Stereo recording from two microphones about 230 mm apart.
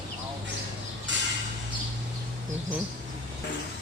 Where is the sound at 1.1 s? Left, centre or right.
Right.